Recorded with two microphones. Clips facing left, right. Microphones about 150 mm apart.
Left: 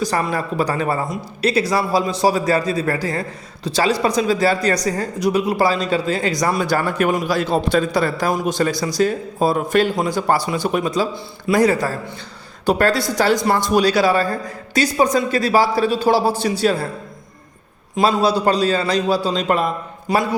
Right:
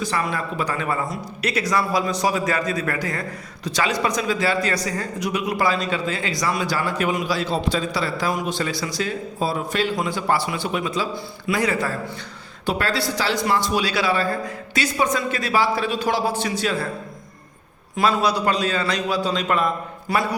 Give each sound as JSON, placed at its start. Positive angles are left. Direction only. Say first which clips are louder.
{"t": 0.0, "sound": "a man's voice", "louder": "left 4 dB", "side_deg": 40}
{"t": 17.9, "sound": "a man's voice", "louder": "left 4 dB", "side_deg": 30}
{"t": 20.1, "sound": "a man's voice", "louder": "left 4 dB", "side_deg": 20}